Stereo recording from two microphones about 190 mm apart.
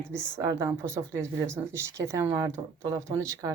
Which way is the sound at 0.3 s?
15° right (ahead or behind).